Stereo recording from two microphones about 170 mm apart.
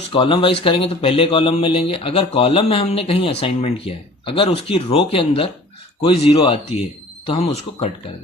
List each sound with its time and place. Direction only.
0.1 s speech: 30° left (ahead or behind)